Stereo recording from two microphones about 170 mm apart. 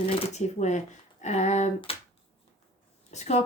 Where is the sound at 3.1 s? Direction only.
40° left (ahead or behind).